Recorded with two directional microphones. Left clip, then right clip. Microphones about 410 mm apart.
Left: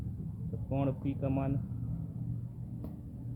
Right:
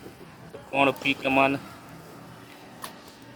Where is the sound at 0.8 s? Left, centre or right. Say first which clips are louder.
Right 14 dB; centre.